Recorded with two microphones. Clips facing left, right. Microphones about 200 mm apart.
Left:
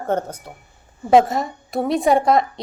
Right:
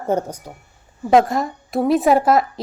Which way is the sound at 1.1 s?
Centre (ahead or behind).